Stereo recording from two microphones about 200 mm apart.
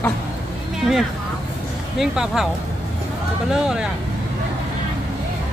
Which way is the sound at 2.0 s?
Centre (ahead or behind).